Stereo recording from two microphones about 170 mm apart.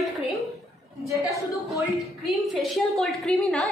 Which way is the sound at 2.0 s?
Centre (ahead or behind).